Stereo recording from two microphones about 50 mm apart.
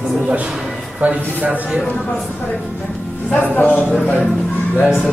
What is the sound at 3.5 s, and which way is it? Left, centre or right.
Speech, left.